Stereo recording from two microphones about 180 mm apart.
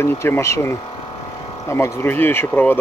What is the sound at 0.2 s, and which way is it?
Speech, 15° left (ahead or behind).